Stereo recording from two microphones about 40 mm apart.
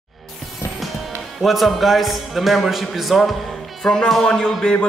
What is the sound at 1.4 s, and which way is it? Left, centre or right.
Speech, centre.